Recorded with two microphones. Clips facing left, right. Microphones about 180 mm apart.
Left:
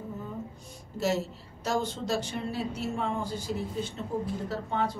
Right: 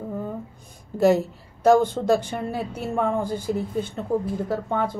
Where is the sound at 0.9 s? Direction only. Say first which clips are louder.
Right 10 dB; 55° right (ahead or behind).